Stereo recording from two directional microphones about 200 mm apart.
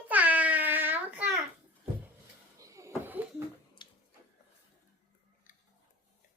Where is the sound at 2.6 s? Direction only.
15° right (ahead or behind).